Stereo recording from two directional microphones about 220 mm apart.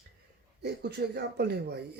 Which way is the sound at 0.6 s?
50° right (ahead or behind).